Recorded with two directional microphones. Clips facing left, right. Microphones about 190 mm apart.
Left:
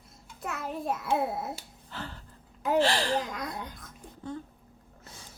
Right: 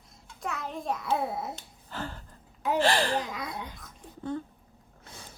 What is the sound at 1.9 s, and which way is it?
Gasp, 45° right (ahead or behind).